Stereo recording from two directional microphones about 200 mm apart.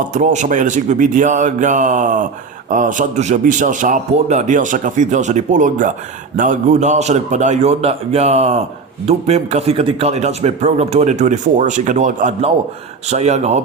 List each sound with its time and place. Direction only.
0.0 s a man's voice: 40° right (ahead or behind)